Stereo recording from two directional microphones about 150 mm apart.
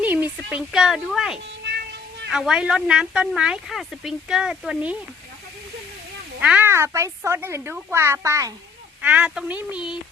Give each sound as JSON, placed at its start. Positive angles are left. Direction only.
{"t": 0.0, "sound": "a woman's voice", "side_deg": -10}
{"t": 1.7, "sound": "music", "side_deg": -90}
{"t": 2.3, "sound": "speech", "side_deg": -5}
{"t": 6.4, "sound": "a woman's voice", "side_deg": -10}
{"t": 9.0, "sound": "a woman's voice", "side_deg": -10}